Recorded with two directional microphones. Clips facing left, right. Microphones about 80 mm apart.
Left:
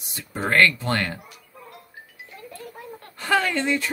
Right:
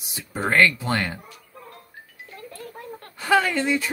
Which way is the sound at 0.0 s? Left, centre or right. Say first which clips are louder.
Right 1 dB; centre.